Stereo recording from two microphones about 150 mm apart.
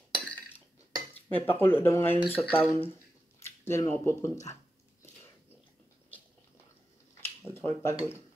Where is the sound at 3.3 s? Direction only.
20° left (ahead or behind).